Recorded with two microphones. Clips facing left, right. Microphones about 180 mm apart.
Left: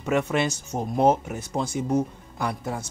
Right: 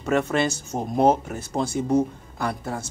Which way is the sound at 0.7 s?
15° right (ahead or behind).